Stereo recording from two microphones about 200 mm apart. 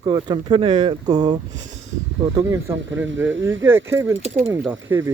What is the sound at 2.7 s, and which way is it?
Speech, 70° right (ahead or behind).